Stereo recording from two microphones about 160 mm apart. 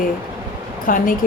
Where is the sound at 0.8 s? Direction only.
60° left (ahead or behind).